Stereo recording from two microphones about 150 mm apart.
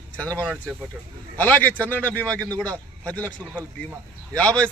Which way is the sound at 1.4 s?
10° left (ahead or behind).